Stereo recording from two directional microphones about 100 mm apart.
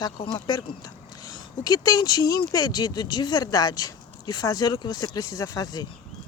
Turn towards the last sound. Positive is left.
turn(degrees=35)  # may be behind; listen again after turning